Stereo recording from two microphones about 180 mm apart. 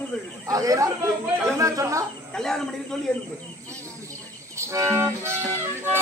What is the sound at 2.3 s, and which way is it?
Speech, 5° left (ahead or behind).